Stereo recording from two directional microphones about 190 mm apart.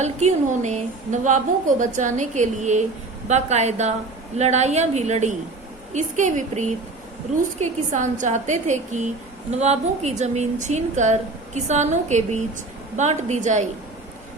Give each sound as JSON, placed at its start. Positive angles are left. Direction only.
{"t": 0.0, "sound": "a woman's voice", "side_deg": -35}